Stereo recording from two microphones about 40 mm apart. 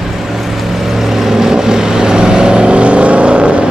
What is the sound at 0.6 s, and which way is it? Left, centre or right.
Vehicle, centre.